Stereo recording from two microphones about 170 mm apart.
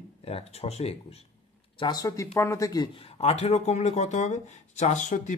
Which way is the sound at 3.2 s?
35° left (ahead or behind).